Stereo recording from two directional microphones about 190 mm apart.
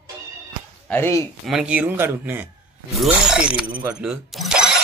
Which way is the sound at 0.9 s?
15° left (ahead or behind).